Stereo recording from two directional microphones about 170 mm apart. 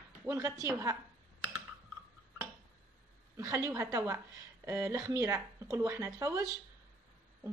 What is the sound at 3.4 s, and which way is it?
Speech, 15° right (ahead or behind).